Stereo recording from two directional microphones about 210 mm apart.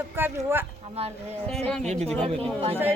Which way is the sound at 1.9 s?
30° right (ahead or behind).